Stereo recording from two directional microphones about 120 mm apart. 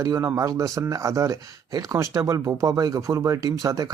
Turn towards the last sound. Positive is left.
turn(degrees=-30)  # may be behind; listen again after turning